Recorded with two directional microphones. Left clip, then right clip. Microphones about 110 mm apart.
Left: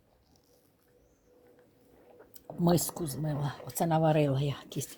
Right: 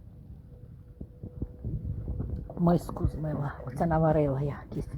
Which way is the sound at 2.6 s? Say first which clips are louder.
Right 1 dB; 15° left (ahead or behind).